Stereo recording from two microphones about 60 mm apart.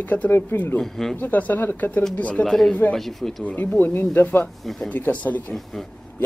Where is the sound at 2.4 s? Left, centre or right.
Centre.